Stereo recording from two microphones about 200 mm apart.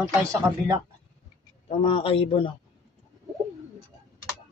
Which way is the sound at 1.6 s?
30° left (ahead or behind).